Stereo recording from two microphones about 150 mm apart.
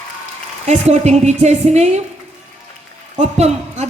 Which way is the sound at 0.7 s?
50° right (ahead or behind).